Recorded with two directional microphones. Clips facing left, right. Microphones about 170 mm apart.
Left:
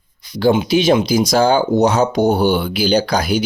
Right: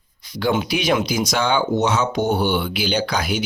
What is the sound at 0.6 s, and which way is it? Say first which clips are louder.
Speech: left 6 dB; 25° left (ahead or behind).